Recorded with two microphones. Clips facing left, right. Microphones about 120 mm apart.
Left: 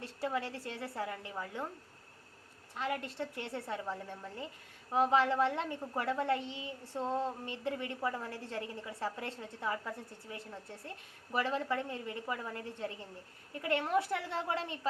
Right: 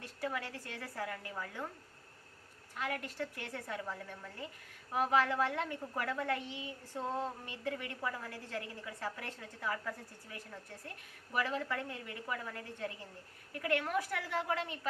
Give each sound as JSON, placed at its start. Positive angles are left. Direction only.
{"t": 0.0, "sound": "a woman's voice", "side_deg": 30}
{"t": 2.7, "sound": "a woman's voice", "side_deg": 30}